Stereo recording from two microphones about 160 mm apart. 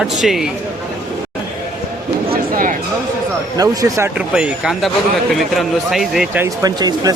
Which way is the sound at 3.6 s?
20° right (ahead or behind).